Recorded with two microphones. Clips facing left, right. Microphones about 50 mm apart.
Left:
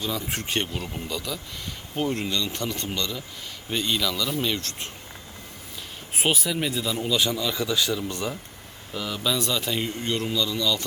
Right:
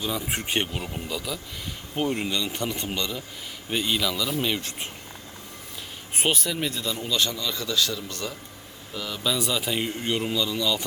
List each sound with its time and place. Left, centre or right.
0.0 s a man's voice: centre
6.1 s a man's voice: centre
9.0 s a man's voice: centre